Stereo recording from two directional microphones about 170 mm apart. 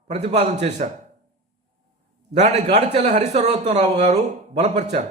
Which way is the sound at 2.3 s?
40° right (ahead or behind).